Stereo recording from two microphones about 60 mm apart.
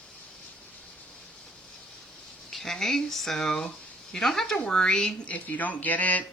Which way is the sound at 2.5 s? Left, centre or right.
Centre.